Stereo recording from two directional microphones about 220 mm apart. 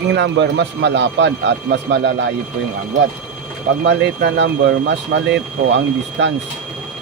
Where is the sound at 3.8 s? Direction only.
50° right (ahead or behind).